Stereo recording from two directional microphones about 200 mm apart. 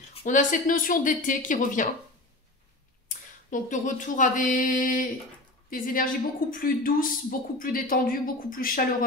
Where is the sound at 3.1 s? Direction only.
40° left (ahead or behind).